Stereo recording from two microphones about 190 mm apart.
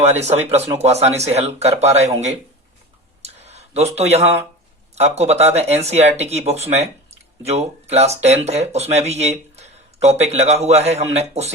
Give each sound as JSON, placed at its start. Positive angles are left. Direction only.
{"t": 0.0, "sound": "speech", "side_deg": -35}
{"t": 3.2, "sound": "a sound", "side_deg": -35}
{"t": 4.9, "sound": "speech", "side_deg": -35}